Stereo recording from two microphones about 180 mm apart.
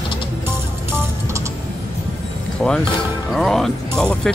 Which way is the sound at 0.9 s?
15° right (ahead or behind).